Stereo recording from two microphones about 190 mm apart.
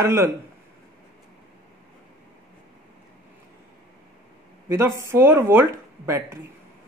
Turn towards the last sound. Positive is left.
turn(degrees=-15)  # may be behind; listen again after turning